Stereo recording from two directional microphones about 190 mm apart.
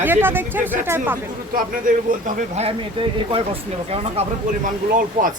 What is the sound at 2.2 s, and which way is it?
Speech, 45° right (ahead or behind).